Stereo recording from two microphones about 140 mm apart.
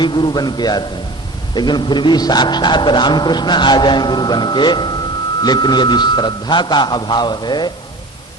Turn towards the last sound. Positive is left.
turn(degrees=30)  # may be behind; listen again after turning